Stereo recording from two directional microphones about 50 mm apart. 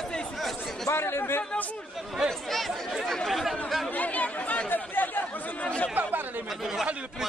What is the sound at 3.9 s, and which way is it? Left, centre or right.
Chatter, left.